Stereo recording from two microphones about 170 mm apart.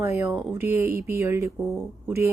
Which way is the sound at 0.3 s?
15° right (ahead or behind).